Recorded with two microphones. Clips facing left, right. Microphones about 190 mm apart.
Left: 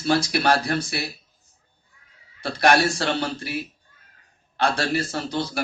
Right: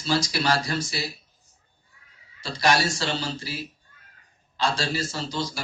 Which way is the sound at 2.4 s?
60° left (ahead or behind).